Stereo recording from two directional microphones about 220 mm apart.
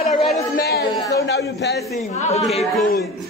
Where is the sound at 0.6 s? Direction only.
45° left (ahead or behind).